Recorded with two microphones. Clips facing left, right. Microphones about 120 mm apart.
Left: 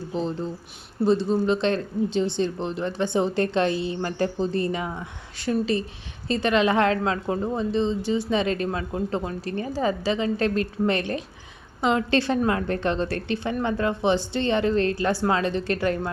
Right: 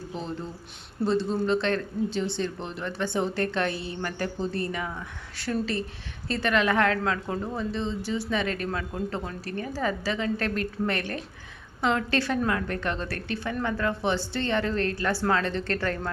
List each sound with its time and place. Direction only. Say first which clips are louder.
1.0 s speech: left 4 dB; 15° left (ahead or behind)